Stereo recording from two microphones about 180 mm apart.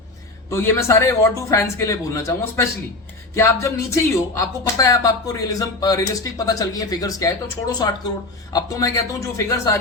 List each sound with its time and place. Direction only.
0.5 s speech: 15° left (ahead or behind)